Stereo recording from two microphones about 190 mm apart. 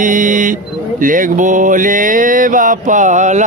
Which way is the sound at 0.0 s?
45° right (ahead or behind).